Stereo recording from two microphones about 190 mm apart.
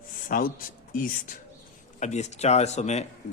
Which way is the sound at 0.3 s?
50° left (ahead or behind).